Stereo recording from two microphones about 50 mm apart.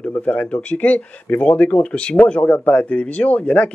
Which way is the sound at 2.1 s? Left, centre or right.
Left.